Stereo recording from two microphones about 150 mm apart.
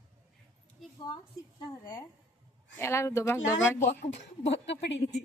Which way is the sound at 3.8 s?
50° left (ahead or behind).